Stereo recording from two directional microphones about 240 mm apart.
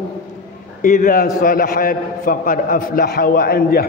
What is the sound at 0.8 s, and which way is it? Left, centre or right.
A man's voice, left.